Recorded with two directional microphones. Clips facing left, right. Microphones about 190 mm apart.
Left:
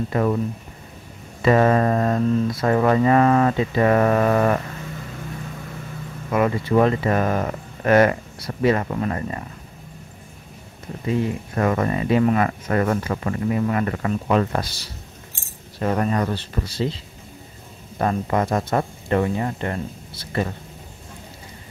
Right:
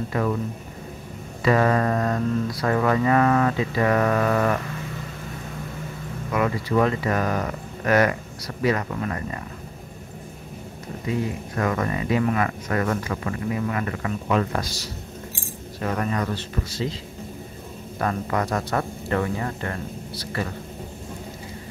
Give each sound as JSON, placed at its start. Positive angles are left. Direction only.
{"t": 1.4, "sound": "speech", "side_deg": 25}
{"t": 6.3, "sound": "speech", "side_deg": 30}
{"t": 11.5, "sound": "speech", "side_deg": 30}
{"t": 15.8, "sound": "speech", "side_deg": 35}
{"t": 17.9, "sound": "speech", "side_deg": 25}